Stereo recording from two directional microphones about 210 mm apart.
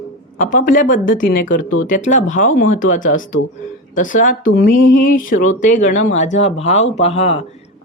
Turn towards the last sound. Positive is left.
turn(degrees=30)  # may be behind; listen again after turning